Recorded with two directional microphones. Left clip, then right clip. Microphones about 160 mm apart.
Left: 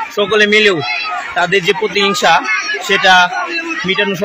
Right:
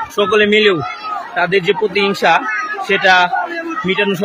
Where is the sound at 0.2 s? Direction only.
25° right (ahead or behind).